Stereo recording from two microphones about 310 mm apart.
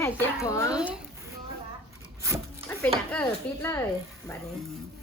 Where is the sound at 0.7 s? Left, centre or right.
Centre.